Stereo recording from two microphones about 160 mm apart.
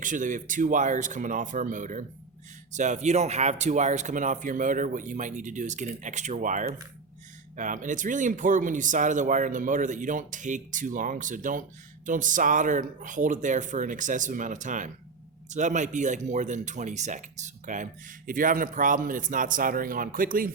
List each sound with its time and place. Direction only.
0.0 s a man's voice: 55° right (ahead or behind)